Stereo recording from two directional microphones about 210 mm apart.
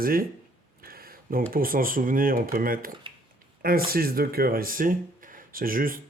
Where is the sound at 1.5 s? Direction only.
45° right (ahead or behind).